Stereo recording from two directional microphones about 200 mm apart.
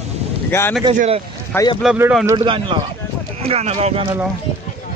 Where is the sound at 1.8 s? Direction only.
5° right (ahead or behind).